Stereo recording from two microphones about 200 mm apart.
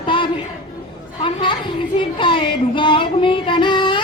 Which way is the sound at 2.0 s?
25° left (ahead or behind).